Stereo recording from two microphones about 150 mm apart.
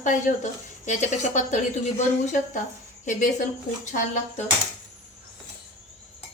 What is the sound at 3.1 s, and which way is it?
A woman's voice, 55° left (ahead or behind).